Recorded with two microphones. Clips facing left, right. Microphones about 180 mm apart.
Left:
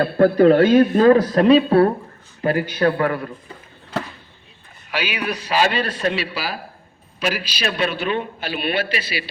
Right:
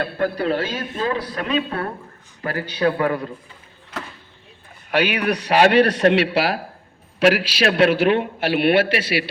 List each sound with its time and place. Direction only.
0.0 s speech: 45° left (ahead or behind)
2.4 s a man's voice: 20° left (ahead or behind)
3.0 s a man's voice: 20° right (ahead or behind)
3.9 s speech: 30° left (ahead or behind)
4.9 s a man's voice: 60° right (ahead or behind)